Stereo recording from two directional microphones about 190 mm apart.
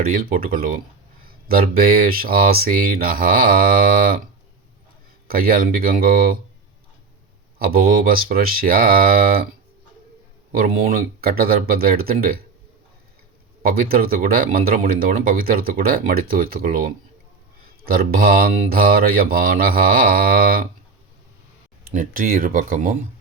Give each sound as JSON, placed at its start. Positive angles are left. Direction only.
{"t": 0.1, "sound": "speech", "side_deg": -50}
{"t": 5.3, "sound": "speech", "side_deg": -50}
{"t": 7.6, "sound": "speech", "side_deg": -50}
{"t": 10.5, "sound": "speech", "side_deg": -50}
{"t": 13.6, "sound": "speech", "side_deg": -50}
{"t": 21.8, "sound": "speech", "side_deg": -45}